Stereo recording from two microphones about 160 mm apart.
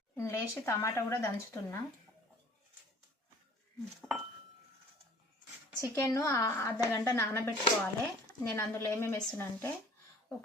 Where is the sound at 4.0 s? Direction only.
Centre (ahead or behind).